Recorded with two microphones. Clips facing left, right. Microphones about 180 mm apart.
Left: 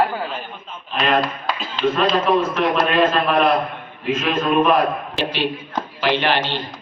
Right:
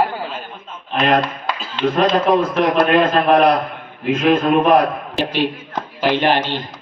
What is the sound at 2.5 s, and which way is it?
A man's voice, 55° right (ahead or behind).